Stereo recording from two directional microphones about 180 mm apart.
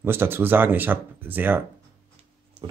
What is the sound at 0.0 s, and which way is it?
Speech, 10° right (ahead or behind).